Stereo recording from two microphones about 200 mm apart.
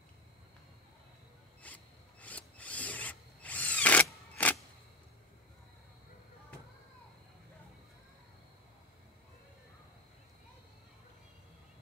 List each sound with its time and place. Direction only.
1.6 s filing: 5° left (ahead or behind)